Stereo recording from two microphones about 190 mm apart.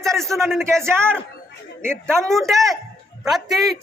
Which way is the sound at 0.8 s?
15° right (ahead or behind).